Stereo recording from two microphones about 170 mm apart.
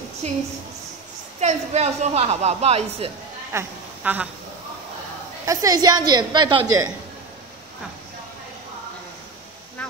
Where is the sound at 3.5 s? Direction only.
10° right (ahead or behind).